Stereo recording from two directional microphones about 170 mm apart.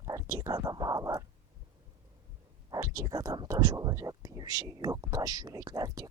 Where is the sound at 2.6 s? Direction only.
20° right (ahead or behind).